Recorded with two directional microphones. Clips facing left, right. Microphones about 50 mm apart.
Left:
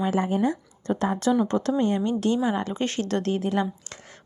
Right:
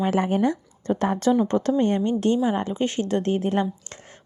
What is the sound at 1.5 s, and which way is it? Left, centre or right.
Speech, right.